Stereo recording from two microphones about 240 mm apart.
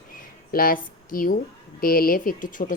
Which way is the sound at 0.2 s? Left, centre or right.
Left.